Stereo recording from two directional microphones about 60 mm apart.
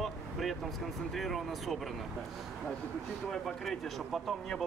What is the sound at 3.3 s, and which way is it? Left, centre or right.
Speech, centre.